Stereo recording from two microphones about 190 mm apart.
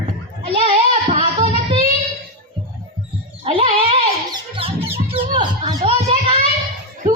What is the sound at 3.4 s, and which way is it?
Music, 30° right (ahead or behind).